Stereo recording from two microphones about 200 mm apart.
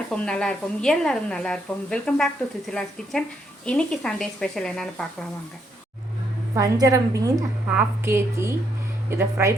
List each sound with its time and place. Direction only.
0.1 s speech: 5° left (ahead or behind)
6.5 s a woman's voice: 15° right (ahead or behind)